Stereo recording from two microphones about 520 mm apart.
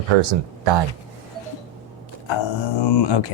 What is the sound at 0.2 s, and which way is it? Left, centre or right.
Speech, right.